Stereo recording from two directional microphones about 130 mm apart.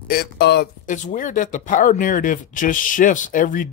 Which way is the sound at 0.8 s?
80° left.